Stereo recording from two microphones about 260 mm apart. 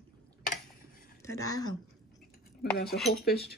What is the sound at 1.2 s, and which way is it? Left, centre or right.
Speech, centre.